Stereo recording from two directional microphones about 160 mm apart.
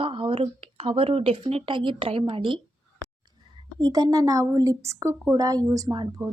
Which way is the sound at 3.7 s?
25° right (ahead or behind).